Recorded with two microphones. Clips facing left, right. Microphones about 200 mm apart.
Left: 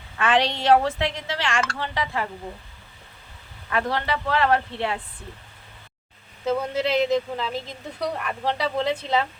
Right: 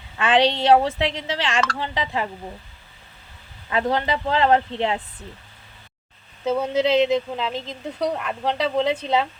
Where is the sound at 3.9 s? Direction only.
15° right (ahead or behind).